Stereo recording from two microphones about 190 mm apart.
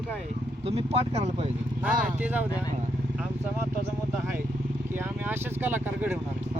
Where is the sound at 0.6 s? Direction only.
30° right (ahead or behind).